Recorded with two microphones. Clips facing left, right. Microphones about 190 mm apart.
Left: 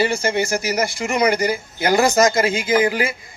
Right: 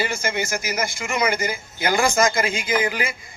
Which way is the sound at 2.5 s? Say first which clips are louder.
Left 5 dB; 25° left (ahead or behind).